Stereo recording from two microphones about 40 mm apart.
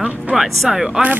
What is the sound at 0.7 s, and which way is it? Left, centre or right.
Speech, centre.